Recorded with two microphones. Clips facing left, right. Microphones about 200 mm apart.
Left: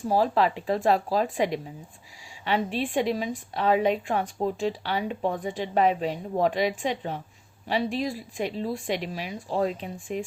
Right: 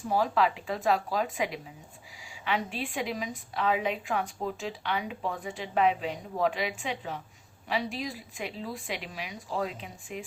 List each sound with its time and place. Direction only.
0.1 s a woman's voice: 35° left (ahead or behind)